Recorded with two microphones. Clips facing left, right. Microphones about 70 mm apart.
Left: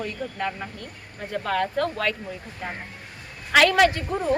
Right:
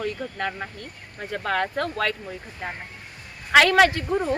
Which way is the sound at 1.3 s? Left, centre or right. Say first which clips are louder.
Left 1 dB; right.